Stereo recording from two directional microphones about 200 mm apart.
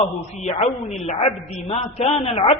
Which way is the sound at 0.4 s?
30° left (ahead or behind).